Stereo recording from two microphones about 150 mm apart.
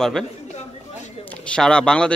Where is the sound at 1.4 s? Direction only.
5° left (ahead or behind).